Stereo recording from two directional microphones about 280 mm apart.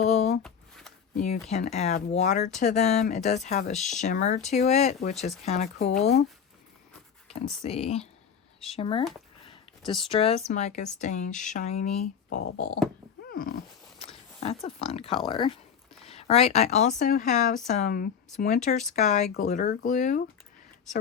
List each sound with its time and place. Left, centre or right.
0.0 s shuffling cards: left
0.4 s shuffling cards: centre
1.2 s speech: left
3.8 s speech: centre
4.0 s speech: left
7.6 s speech: left
9.5 s a sound: centre
10.1 s speech: left
14.0 s a sound: left
15.3 s speech: centre